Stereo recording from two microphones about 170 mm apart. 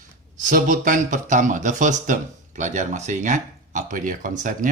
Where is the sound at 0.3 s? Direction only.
50° right (ahead or behind).